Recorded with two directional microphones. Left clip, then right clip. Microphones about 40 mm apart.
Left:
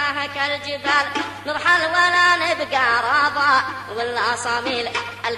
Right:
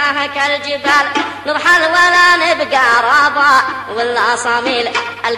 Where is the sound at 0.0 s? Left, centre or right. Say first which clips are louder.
Right 8 dB; right.